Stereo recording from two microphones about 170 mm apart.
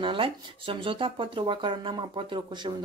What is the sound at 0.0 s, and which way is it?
A man's voice, 30° right (ahead or behind).